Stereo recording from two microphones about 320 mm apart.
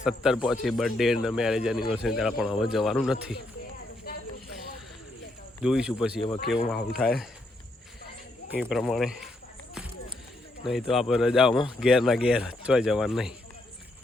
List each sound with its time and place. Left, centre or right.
0.0 s speech: centre
4.1 s a sound: left
5.6 s speech: centre
8.5 s speech: centre
10.6 s speech: centre